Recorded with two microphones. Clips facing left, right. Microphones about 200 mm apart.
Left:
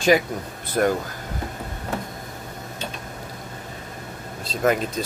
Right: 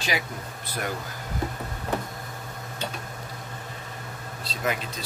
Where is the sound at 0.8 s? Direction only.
45° left (ahead or behind).